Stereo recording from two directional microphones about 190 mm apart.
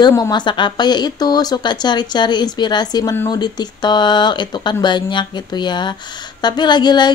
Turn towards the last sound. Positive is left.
turn(degrees=25)  # may be behind; listen again after turning